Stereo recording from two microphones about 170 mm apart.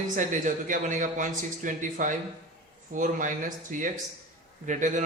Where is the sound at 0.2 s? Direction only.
50° right (ahead or behind).